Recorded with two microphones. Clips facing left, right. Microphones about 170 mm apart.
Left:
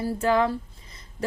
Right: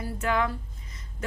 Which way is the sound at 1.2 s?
35° left (ahead or behind).